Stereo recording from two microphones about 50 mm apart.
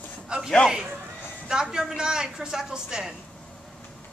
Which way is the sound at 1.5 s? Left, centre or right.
Centre.